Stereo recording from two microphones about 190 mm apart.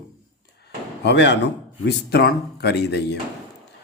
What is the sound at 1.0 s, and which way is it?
Speech, 65° left (ahead or behind).